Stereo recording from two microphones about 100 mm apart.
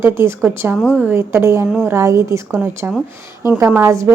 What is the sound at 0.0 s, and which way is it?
Speech, 25° right (ahead or behind).